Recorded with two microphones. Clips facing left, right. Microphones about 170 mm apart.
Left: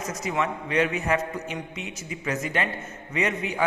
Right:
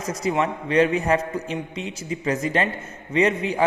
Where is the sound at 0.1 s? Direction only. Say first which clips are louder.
Right 5 dB; 35° right (ahead or behind).